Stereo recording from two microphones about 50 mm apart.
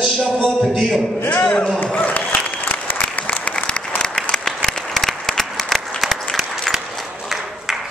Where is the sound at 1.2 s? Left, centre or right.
Left.